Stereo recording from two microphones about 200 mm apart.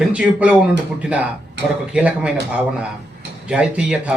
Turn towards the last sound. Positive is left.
turn(degrees=-5)  # may be behind; listen again after turning